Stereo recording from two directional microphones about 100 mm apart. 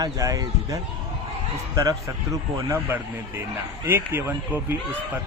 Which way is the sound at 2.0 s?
35° right (ahead or behind).